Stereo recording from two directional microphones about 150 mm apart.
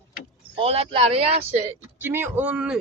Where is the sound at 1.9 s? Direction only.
15° right (ahead or behind).